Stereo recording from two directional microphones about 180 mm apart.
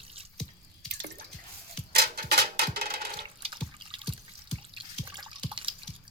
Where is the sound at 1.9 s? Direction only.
60° right (ahead or behind).